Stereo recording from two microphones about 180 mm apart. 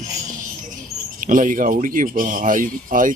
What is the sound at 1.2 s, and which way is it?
Speech, 50° right (ahead or behind).